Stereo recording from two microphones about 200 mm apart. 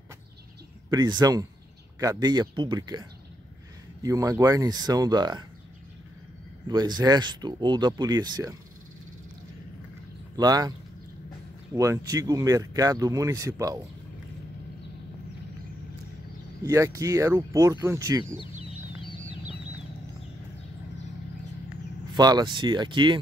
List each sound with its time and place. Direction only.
0.8 s speech: 20° right (ahead or behind)
6.7 s speech: 20° right (ahead or behind)
10.3 s speech: 20° right (ahead or behind)
11.7 s speech: 15° right (ahead or behind)
16.6 s speech: 15° right (ahead or behind)
22.1 s speech: 20° right (ahead or behind)